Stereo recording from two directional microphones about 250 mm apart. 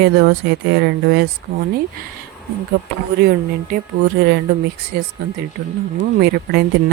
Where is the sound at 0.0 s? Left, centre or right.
Right.